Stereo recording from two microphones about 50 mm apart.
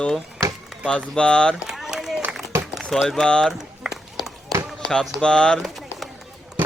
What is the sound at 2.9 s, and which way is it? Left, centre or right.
Speech, centre.